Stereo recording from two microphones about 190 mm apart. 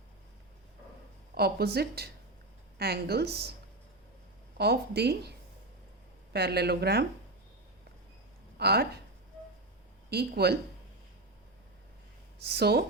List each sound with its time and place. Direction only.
1.4 s speech: 55° right (ahead or behind)
4.5 s speech: 55° right (ahead or behind)
6.3 s speech: 60° right (ahead or behind)
8.5 s speech: 55° right (ahead or behind)
10.1 s speech: 55° right (ahead or behind)
12.5 s speech: 60° right (ahead or behind)